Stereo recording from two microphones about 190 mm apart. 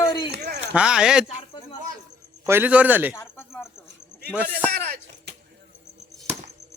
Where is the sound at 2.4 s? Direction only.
10° right (ahead or behind).